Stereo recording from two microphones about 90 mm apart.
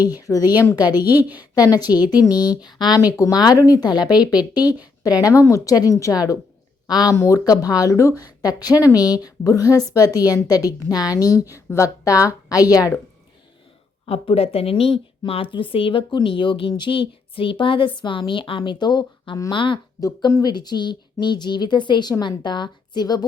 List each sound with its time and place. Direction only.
0.2 s a woman's voice: 40° left (ahead or behind)
0.8 s a woman's voice: 20° right (ahead or behind)
1.4 s a woman's voice: 45° left (ahead or behind)
5.2 s a woman's voice: 35° left (ahead or behind)
7.2 s a woman's voice: 35° left (ahead or behind)
14.1 s speech: 90° left
15.3 s speech: 80° left
16.2 s a woman's voice: 70° left (ahead or behind)
19.5 s a woman's voice: 70° left (ahead or behind)
20.0 s a woman's voice: 40° left (ahead or behind)